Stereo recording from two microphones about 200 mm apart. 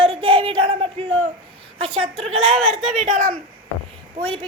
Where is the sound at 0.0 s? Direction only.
30° right (ahead or behind).